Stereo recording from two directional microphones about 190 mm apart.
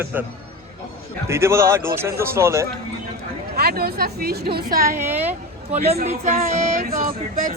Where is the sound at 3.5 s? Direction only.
55° right (ahead or behind).